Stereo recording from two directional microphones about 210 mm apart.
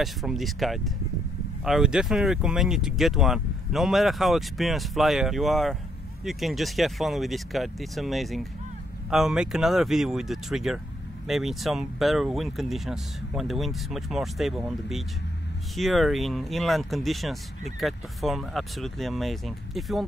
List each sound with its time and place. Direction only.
0.0 s speech: centre (ahead or behind)